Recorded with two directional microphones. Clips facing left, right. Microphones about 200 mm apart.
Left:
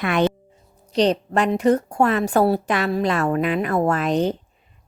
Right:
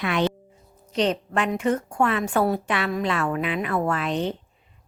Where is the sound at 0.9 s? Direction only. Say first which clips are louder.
Left 5 dB; 35° left (ahead or behind).